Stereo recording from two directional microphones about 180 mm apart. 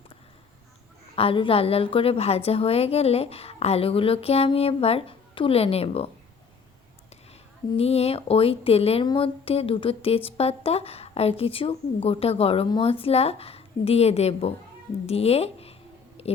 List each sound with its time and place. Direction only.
1.1 s speech: 30° left (ahead or behind)
7.8 s speech: 35° left (ahead or behind)
16.2 s a sound: 35° left (ahead or behind)